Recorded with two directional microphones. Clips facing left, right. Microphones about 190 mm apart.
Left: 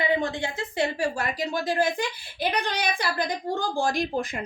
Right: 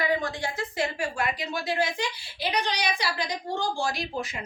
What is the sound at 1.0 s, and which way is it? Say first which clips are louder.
A woman's voice: left 2 dB; 45° left (ahead or behind).